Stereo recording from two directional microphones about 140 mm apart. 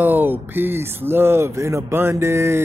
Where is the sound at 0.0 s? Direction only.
15° right (ahead or behind).